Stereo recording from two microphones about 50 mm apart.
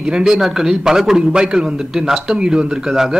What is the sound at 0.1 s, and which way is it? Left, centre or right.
A man's voice, centre.